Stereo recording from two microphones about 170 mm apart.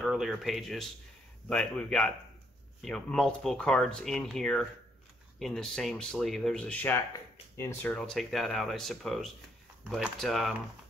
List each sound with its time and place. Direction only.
0.0 s speech: centre (ahead or behind)